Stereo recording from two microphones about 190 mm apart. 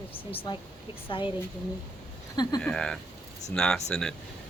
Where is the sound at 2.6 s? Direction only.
5° left (ahead or behind).